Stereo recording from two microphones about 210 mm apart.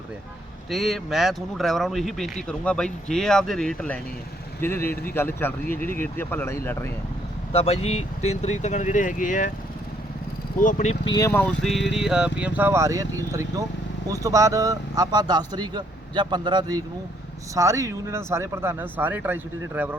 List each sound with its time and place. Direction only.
0.7 s speech: centre (ahead or behind)
7.5 s speech: 30° left (ahead or behind)
10.6 s speech: 35° left (ahead or behind)
11.0 s speech: 20° left (ahead or behind); by 20.0 s 10° right (ahead or behind)